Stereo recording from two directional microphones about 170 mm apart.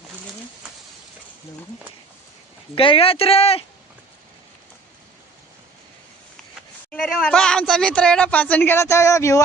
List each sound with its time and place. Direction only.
2.7 s speech: 35° left (ahead or behind)
6.9 s speech: 5° left (ahead or behind)